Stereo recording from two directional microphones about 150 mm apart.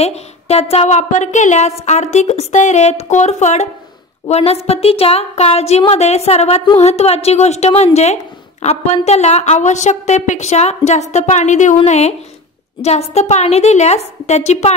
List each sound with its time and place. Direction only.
0.0 s a woman's voice: 45° left (ahead or behind)